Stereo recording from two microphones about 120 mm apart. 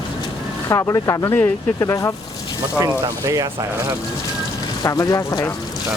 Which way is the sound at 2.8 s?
30° right (ahead or behind).